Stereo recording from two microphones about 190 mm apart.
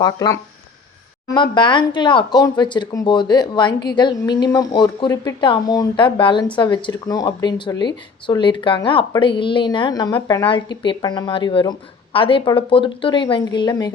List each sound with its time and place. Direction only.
0.0 s speech: 20° left (ahead or behind)
3.7 s a woman's voice: 60° left (ahead or behind)
3.9 s speech: 20° left (ahead or behind)